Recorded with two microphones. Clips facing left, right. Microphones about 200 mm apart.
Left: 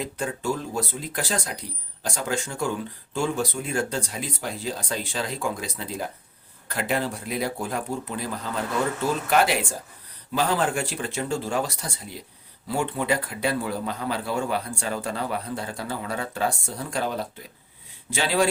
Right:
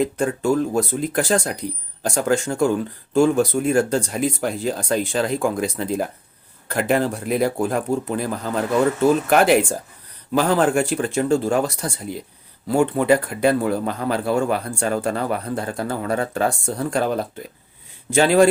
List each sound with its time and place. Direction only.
0.0 s a man's voice: 50° right (ahead or behind)
9.3 s a man's voice: 50° right (ahead or behind)